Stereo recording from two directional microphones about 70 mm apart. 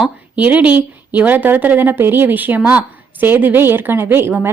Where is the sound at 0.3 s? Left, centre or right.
Right.